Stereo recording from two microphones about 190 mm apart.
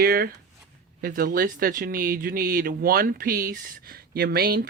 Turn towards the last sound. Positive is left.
turn(degrees=-50)  # may be behind; listen again after turning